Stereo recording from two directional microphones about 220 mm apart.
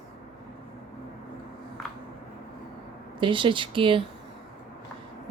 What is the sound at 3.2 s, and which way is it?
Speech, 20° right (ahead or behind).